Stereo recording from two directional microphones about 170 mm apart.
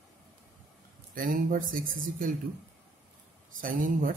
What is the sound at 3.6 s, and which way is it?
Speech, 55° right (ahead or behind).